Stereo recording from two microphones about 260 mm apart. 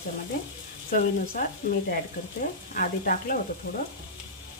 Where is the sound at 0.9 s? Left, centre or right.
Left.